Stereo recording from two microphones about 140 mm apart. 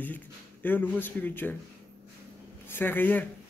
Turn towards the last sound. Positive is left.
turn(degrees=10)  # may be behind; listen again after turning